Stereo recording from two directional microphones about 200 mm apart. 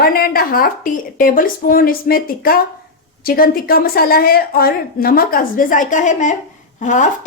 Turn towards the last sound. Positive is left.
turn(degrees=40)  # may be behind; listen again after turning